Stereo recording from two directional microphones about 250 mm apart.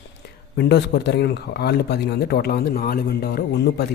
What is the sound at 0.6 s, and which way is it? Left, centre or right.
A man's voice, left.